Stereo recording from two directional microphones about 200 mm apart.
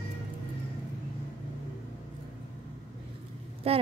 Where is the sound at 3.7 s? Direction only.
30° right (ahead or behind).